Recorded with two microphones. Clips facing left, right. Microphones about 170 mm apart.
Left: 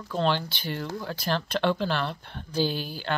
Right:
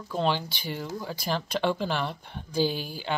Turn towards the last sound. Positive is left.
turn(degrees=-10)  # may be behind; listen again after turning